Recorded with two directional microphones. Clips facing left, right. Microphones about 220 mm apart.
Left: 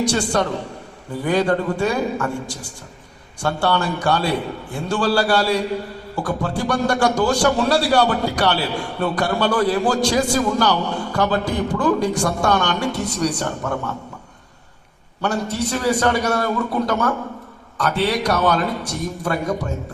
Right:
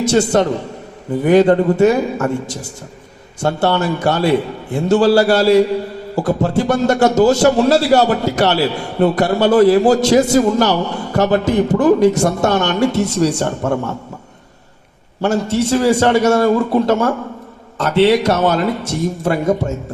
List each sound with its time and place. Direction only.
0.0 s a man's voice: 25° right (ahead or behind)
15.2 s a man's voice: 25° right (ahead or behind)